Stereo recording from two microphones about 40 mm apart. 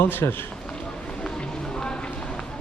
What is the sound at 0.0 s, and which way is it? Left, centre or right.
Speech, left.